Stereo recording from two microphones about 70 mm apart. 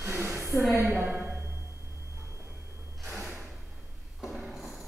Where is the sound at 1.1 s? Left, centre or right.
Right.